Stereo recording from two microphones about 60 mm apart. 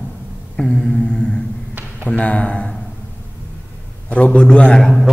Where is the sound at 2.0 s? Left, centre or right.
Left.